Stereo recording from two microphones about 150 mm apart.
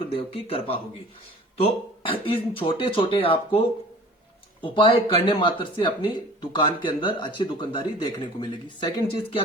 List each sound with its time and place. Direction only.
0.2 s speech: 40° left (ahead or behind)
4.6 s speech: 35° left (ahead or behind)